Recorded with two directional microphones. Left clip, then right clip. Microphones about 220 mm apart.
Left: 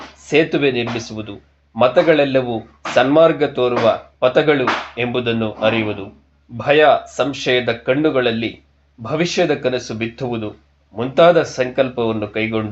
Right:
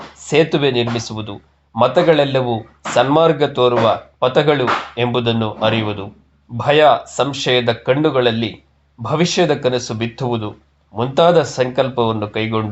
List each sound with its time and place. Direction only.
0.3 s speech: 25° right (ahead or behind)